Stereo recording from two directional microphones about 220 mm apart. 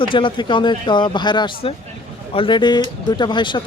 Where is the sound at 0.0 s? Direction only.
20° left (ahead or behind).